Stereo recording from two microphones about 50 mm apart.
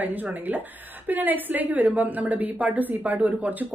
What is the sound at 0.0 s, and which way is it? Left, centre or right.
A woman's voice, right.